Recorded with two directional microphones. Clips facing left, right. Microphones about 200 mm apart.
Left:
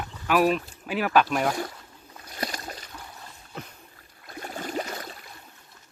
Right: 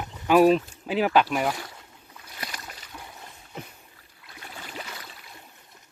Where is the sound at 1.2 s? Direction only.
5° right (ahead or behind).